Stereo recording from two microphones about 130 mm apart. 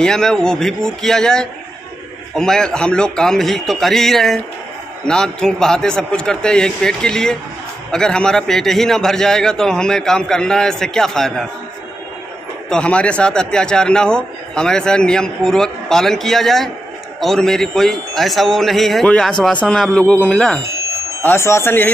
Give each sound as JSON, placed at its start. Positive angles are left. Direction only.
{"t": 0.0, "sound": "a man's voice", "side_deg": 5}
{"t": 12.6, "sound": "a man's voice", "side_deg": 5}
{"t": 21.2, "sound": "speech", "side_deg": 20}